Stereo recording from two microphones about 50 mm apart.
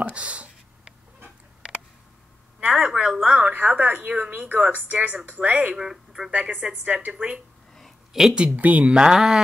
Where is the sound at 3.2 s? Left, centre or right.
Right.